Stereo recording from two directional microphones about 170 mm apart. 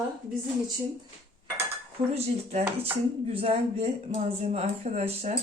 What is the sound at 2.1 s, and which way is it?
Speech, 35° right (ahead or behind).